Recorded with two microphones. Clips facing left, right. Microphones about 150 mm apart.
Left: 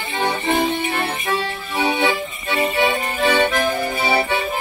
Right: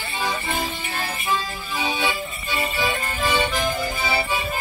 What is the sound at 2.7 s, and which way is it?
Music, 65° left (ahead or behind).